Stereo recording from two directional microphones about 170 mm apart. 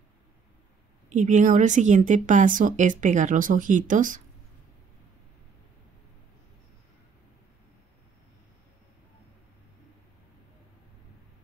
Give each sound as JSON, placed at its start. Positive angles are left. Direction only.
{"t": 1.1, "sound": "a woman's voice", "side_deg": -45}